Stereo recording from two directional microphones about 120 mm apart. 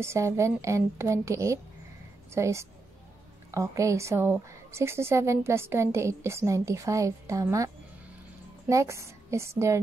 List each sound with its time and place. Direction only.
0.0 s a woman's voice: 25° right (ahead or behind)
8.6 s a woman's voice: 25° right (ahead or behind)